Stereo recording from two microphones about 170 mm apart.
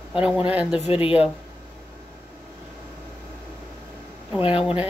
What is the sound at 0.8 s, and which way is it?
Speech, 35° left (ahead or behind).